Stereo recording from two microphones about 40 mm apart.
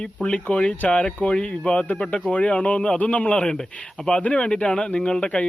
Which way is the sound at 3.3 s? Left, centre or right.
Left.